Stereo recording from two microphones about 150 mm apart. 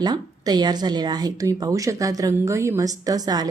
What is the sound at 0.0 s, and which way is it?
Speech, 25° right (ahead or behind).